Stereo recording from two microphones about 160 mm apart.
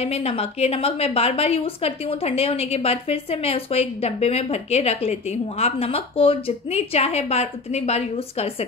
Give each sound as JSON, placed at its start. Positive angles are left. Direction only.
{"t": 0.0, "sound": "a woman's voice", "side_deg": 40}